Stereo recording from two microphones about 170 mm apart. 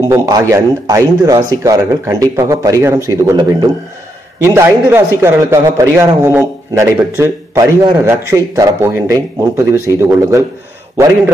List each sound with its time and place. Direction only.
0.1 s a man's voice: 20° right (ahead or behind)